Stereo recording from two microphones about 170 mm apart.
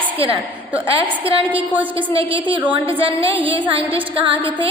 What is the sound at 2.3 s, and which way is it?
A woman's voice, 30° right (ahead or behind).